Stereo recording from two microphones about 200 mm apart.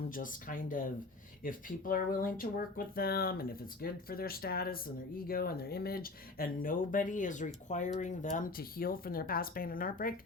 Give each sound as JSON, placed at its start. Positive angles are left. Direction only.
{"t": 0.1, "sound": "speech", "side_deg": 45}